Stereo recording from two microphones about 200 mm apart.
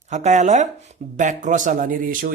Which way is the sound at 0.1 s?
35° right (ahead or behind).